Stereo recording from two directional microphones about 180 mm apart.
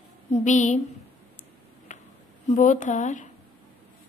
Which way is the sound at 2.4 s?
45° left (ahead or behind).